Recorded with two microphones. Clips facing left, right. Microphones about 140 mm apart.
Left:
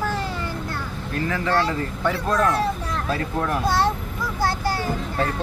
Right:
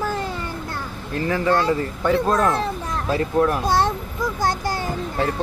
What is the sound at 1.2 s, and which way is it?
Speech, 25° right (ahead or behind).